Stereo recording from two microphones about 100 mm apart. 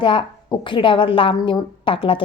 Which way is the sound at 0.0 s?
55° left (ahead or behind).